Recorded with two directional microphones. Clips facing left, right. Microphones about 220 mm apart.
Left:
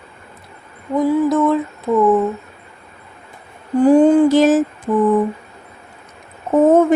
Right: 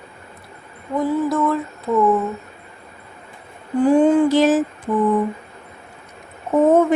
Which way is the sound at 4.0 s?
45° left (ahead or behind).